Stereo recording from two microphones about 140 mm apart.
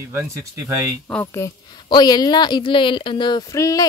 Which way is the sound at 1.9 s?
30° left (ahead or behind).